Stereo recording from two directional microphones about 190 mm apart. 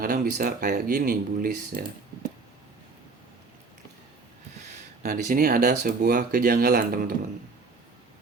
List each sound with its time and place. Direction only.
0.0 s speech: 50° right (ahead or behind)
5.0 s speech: 50° right (ahead or behind)